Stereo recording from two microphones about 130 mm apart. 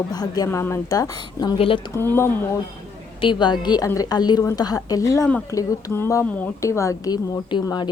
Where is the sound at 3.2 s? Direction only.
40° left (ahead or behind).